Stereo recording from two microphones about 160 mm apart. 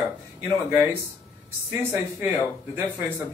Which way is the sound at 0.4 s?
15° right (ahead or behind).